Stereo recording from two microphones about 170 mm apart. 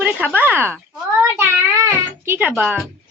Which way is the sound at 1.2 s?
15° right (ahead or behind).